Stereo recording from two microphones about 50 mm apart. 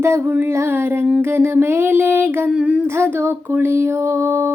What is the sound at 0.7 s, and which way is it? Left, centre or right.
Female singing, right.